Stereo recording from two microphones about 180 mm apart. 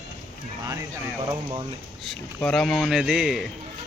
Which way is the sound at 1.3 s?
15° right (ahead or behind).